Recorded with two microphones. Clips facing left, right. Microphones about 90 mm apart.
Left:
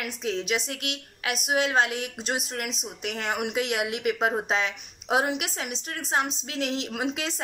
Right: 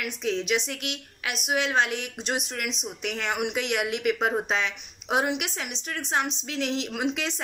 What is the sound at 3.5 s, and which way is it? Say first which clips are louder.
Speech: even; 20° left (ahead or behind).